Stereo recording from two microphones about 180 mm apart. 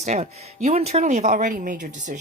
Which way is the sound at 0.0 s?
35° right (ahead or behind).